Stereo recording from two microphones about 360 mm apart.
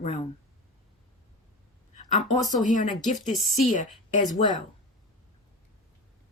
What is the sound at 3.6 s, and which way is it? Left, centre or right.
Speech, left.